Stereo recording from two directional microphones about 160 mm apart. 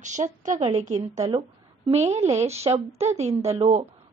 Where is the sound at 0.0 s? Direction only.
50° right (ahead or behind).